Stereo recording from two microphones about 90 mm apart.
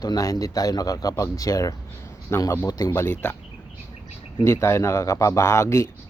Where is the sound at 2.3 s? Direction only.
30° left (ahead or behind).